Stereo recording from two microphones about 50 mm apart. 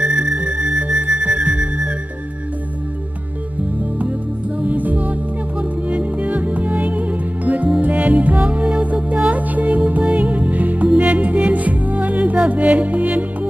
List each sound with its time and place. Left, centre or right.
0.0 s music: right
4.6 s music: right